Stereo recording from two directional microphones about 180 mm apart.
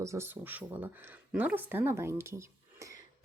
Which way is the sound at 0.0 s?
15° right (ahead or behind).